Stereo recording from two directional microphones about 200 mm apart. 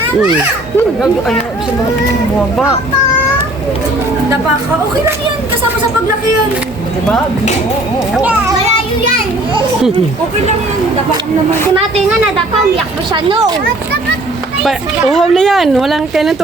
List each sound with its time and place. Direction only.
8.1 s a child's voice: 5° right (ahead or behind)
13.1 s speech: 25° right (ahead or behind)
14.6 s speech: centre (ahead or behind)